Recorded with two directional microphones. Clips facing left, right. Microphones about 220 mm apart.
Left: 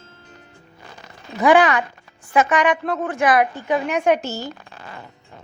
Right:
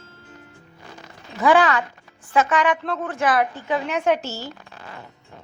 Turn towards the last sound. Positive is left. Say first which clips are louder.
# left 3 dB
turn(degrees=15)  # may be behind; listen again after turning